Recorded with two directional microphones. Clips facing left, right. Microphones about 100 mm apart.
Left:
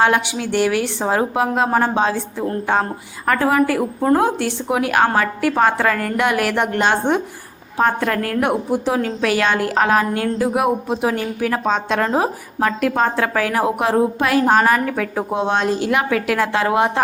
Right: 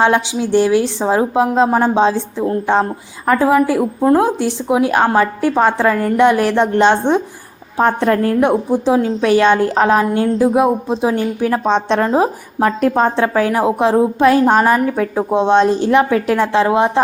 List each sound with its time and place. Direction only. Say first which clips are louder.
0.0 s a woman's voice: right 3 dB; 20° right (ahead or behind)